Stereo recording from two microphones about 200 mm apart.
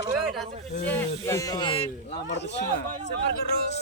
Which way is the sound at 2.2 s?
60° left (ahead or behind).